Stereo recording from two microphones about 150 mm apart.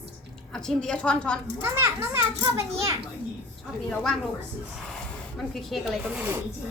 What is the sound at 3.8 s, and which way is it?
Speech, centre (ahead or behind).